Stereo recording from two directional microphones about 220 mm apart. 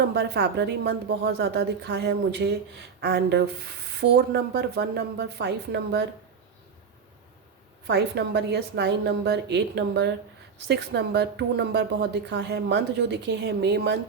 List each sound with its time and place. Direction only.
0.1 s a woman's voice: 50° right (ahead or behind)
7.9 s a woman's voice: 50° right (ahead or behind)